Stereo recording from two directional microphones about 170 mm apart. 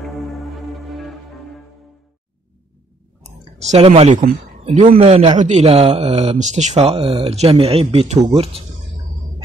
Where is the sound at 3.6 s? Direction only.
40° right (ahead or behind).